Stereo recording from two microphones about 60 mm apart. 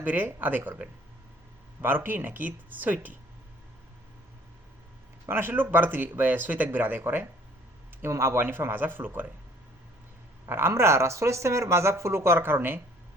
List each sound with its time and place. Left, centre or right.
0.0 s speech: right
5.3 s speech: right
8.0 s speech: right
10.5 s speech: right